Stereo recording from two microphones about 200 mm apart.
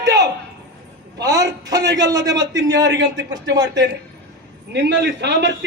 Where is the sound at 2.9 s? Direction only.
65° right (ahead or behind).